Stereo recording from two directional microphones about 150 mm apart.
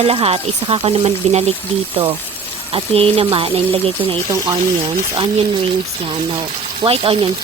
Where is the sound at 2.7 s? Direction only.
40° right (ahead or behind).